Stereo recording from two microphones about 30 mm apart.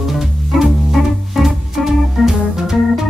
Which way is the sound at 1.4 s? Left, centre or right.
Centre.